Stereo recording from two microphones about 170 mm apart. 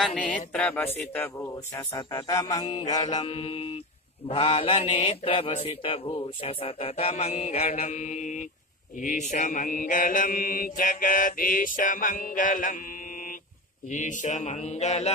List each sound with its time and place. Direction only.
0.0 s a man's voice: 5° left (ahead or behind)
2.0 s music: 20° left (ahead or behind)
3.3 s speech: 35° left (ahead or behind)
9.0 s mantra: 45° left (ahead or behind)
13.9 s mantra: 45° left (ahead or behind)